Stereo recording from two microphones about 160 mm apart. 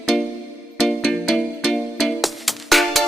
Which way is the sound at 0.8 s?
Centre (ahead or behind).